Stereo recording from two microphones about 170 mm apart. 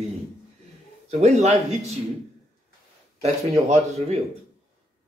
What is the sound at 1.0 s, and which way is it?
Speech, 40° right (ahead or behind).